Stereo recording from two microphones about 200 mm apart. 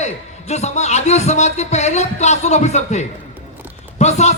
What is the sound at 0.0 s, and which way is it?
A man's voice, 35° left (ahead or behind).